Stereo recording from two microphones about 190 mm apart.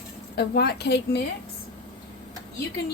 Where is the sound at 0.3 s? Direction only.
55° left (ahead or behind).